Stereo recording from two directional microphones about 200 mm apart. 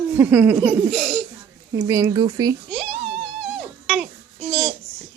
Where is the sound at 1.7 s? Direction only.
15° right (ahead or behind).